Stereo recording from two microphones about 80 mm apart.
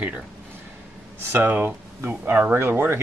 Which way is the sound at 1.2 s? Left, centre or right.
Right.